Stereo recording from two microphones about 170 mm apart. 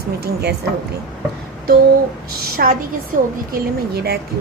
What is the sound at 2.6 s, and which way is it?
A woman's voice, 60° right (ahead or behind).